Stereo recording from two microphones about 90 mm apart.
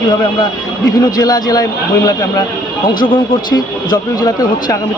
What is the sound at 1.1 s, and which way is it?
Speech, 45° left (ahead or behind).